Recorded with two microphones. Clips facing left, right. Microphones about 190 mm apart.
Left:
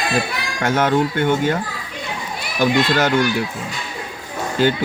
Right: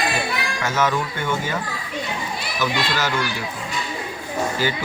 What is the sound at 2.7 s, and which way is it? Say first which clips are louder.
Speech: left 9 dB; 55° left (ahead or behind).